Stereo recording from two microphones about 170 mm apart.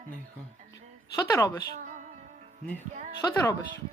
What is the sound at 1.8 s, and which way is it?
Music, 50° right (ahead or behind).